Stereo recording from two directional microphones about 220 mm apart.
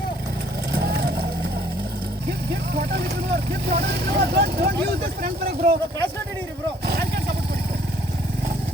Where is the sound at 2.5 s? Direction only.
45° right (ahead or behind).